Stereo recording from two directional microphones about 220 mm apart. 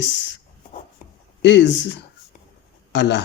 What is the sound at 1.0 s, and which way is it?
Writing, 40° left (ahead or behind).